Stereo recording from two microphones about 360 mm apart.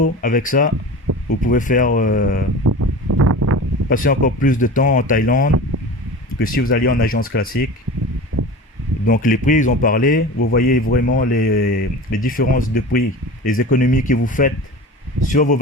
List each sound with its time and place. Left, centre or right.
0.0 s speech: left
2.6 s a sound: right
3.8 s speech: left
9.0 s speech: left